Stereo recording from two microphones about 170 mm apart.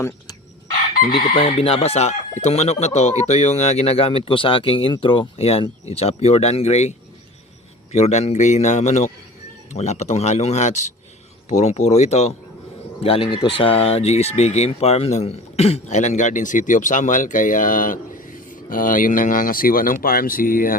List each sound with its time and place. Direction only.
1.4 s speech: 35° left (ahead or behind)
7.9 s a man's voice: 40° left (ahead or behind)